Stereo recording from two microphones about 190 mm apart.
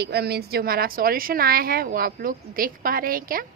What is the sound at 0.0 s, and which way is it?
A woman's voice, 60° right (ahead or behind).